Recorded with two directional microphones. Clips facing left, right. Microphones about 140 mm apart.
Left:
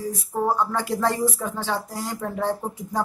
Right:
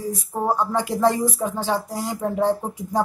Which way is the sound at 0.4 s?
20° right (ahead or behind).